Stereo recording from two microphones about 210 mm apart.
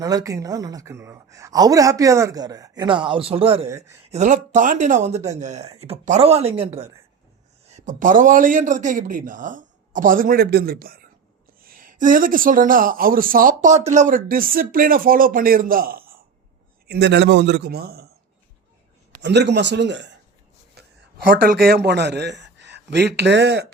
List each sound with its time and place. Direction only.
0.0 s a woman's voice: 15° right (ahead or behind)
3.7 s a woman's voice: 15° right (ahead or behind)
4.1 s speech: 35° right (ahead or behind)
16.9 s speech: 55° right (ahead or behind)
19.2 s speech: 55° right (ahead or behind)
20.8 s a sound: 50° right (ahead or behind)
21.4 s speech: 45° right (ahead or behind)